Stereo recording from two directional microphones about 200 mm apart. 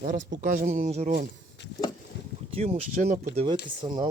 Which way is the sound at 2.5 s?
35° right (ahead or behind).